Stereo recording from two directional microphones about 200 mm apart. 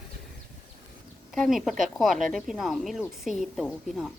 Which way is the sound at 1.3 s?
Centre (ahead or behind).